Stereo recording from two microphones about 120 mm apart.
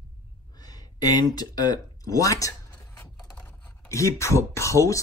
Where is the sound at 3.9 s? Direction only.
25° left (ahead or behind).